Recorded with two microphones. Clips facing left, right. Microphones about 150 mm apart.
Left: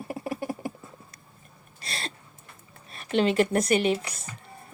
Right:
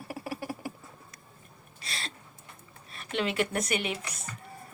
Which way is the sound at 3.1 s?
35° left (ahead or behind).